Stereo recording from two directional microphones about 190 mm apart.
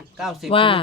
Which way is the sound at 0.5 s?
30° left (ahead or behind).